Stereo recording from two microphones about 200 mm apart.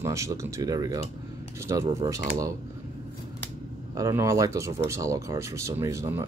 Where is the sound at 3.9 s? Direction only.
15° right (ahead or behind).